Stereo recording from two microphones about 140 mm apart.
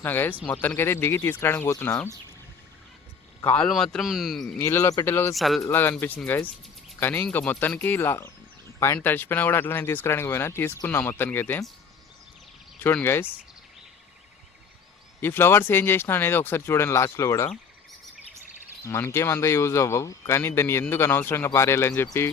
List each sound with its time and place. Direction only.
0.0 s speech: 15° left (ahead or behind)
3.4 s speech: 5° left (ahead or behind)
4.6 s speech: 20° left (ahead or behind)
5.3 s speech: centre (ahead or behind)
5.6 s speech: 15° left (ahead or behind)
12.8 s speech: 15° left (ahead or behind)
15.2 s speech: 15° left (ahead or behind)
18.8 s speech: 20° left (ahead or behind)